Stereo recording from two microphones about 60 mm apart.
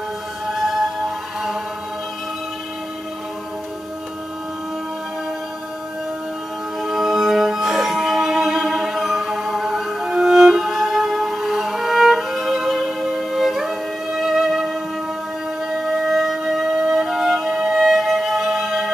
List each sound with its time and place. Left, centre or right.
6.8 s music: centre
15.8 s music: centre